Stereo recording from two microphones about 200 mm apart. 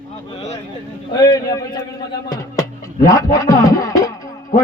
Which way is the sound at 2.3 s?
15° left (ahead or behind).